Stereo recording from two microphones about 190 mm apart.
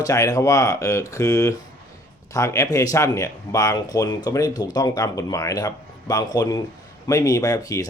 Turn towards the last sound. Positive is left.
turn(degrees=20)  # may be behind; listen again after turning